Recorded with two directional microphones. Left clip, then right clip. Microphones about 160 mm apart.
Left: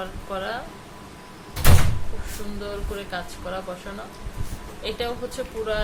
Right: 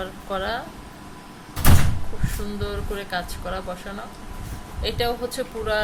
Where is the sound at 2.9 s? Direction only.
35° right (ahead or behind).